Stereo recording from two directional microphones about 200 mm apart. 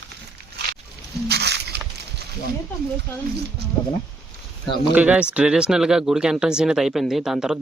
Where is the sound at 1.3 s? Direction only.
55° right (ahead or behind).